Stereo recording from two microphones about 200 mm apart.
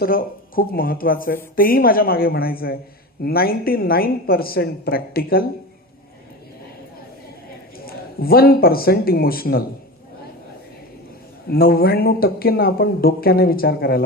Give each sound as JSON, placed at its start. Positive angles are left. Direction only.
{"t": 0.0, "sound": "speech", "side_deg": 45}
{"t": 7.9, "sound": "speech", "side_deg": 50}
{"t": 11.4, "sound": "speech", "side_deg": 50}